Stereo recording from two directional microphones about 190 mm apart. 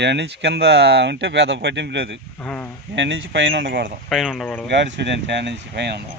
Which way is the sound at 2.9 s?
70° right (ahead or behind).